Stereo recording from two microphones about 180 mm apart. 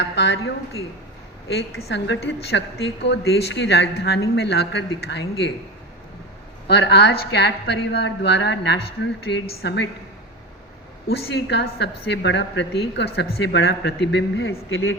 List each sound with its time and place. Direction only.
0.0 s a woman's voice: 75° left (ahead or behind)
6.7 s a woman's voice: 70° left (ahead or behind)
11.1 s a woman's voice: 70° left (ahead or behind); by 14.9 s 90° left